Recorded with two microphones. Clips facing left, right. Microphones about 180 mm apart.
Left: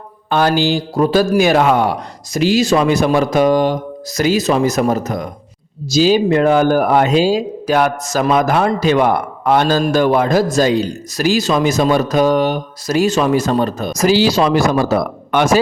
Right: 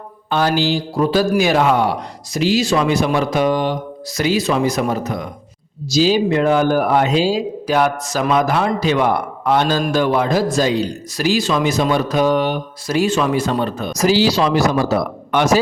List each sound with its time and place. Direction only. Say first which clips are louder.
0.3 s a man's voice: left 3 dB; 50° left (ahead or behind)